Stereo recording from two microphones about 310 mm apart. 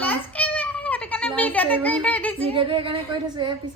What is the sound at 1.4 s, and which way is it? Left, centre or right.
A child's voice, centre.